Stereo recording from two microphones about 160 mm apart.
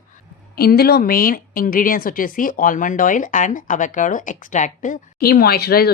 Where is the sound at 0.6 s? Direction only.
75° left (ahead or behind).